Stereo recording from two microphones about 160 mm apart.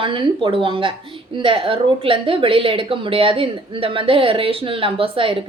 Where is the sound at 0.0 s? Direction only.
30° right (ahead or behind).